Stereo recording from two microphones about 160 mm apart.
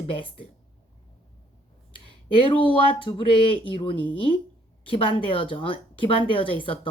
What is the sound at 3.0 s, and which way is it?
A woman's voice, 30° left (ahead or behind).